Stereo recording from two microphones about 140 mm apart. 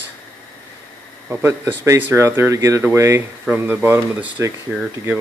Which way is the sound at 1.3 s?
15° right (ahead or behind).